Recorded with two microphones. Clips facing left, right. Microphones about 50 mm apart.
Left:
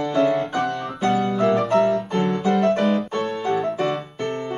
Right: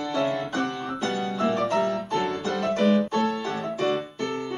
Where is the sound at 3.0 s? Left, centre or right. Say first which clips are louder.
Even; centre.